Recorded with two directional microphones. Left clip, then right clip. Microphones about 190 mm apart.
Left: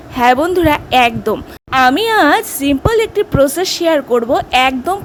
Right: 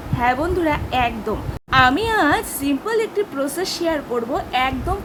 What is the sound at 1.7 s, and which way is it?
Speech, 35° left (ahead or behind).